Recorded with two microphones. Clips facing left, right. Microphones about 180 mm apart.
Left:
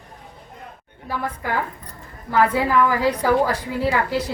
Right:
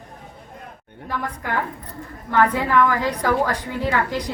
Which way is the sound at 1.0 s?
10° left (ahead or behind).